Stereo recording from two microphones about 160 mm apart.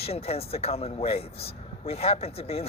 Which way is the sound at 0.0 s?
40° left (ahead or behind).